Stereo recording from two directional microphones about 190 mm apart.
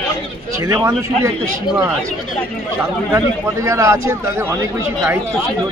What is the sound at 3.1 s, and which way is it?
A man's voice, 15° right (ahead or behind).